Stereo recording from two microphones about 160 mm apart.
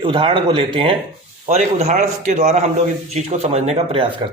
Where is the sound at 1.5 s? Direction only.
45° right (ahead or behind).